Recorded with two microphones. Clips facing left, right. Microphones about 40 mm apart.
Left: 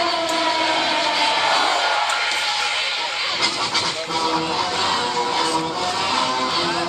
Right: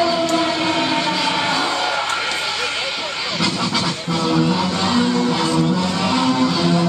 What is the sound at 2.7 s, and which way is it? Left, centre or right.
Vehicle, centre.